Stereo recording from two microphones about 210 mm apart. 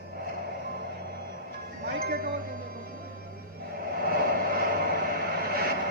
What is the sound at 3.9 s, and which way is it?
Vehicle, 45° right (ahead or behind).